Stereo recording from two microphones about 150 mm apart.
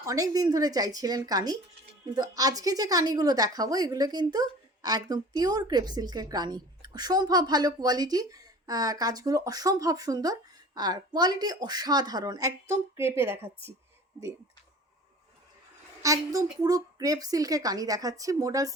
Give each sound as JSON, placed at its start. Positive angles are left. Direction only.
{"t": 0.0, "sound": "a woman's voice", "side_deg": -25}
{"t": 16.0, "sound": "a woman's voice", "side_deg": -20}